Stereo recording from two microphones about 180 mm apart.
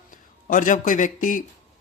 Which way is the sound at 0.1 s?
45° left (ahead or behind).